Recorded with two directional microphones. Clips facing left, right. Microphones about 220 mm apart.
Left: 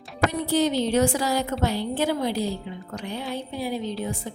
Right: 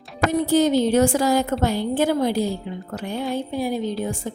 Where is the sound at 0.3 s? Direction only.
45° right (ahead or behind).